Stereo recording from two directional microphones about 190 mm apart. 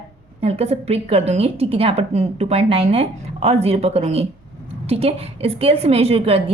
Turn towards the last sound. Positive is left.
turn(degrees=-30)  # may be behind; listen again after turning